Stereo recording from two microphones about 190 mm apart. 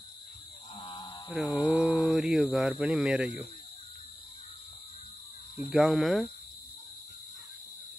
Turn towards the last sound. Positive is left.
turn(degrees=0)  # may be behind; listen again after turning